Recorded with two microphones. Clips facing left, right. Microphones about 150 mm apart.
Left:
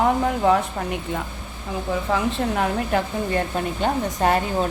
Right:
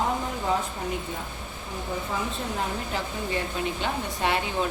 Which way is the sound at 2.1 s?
65° left (ahead or behind).